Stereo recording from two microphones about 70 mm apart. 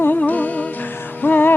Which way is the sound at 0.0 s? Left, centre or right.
Left.